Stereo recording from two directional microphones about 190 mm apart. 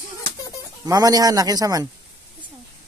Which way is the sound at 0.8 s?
20° right (ahead or behind).